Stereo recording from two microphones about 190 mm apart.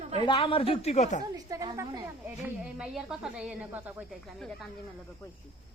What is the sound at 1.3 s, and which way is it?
Speech, 20° right (ahead or behind).